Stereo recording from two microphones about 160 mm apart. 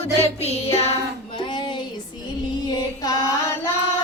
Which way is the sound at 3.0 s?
20° left (ahead or behind).